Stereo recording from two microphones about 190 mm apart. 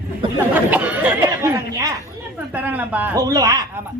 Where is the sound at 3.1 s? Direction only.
20° right (ahead or behind).